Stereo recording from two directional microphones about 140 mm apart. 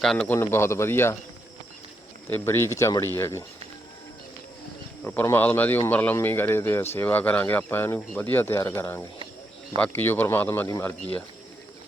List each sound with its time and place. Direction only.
0.0 s a man's voice: 5° left (ahead or behind)
0.3 s speech: 20° left (ahead or behind)
2.3 s speech: 15° left (ahead or behind)
5.2 s speech: 15° left (ahead or behind)